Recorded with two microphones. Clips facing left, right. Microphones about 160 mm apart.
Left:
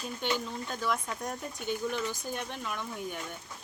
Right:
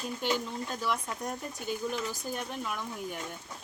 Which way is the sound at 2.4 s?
Centre (ahead or behind).